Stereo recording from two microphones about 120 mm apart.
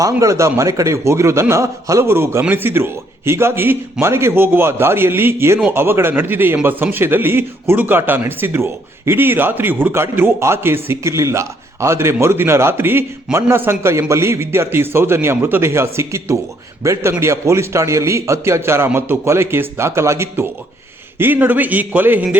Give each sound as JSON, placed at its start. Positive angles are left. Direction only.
{"t": 0.0, "sound": "a man's voice", "side_deg": -25}